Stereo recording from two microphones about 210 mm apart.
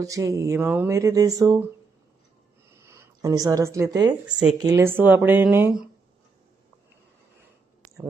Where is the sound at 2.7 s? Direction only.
15° right (ahead or behind).